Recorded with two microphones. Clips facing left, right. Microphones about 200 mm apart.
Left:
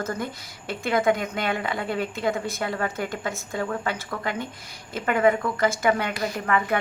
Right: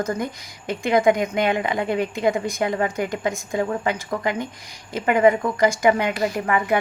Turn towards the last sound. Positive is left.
turn(degrees=-15)  # may be behind; listen again after turning